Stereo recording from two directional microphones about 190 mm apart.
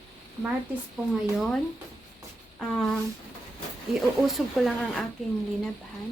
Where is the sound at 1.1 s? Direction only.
Centre (ahead or behind).